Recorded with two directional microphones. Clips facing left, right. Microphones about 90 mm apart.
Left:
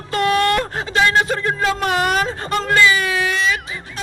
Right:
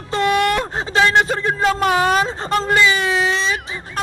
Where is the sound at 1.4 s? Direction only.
20° right (ahead or behind).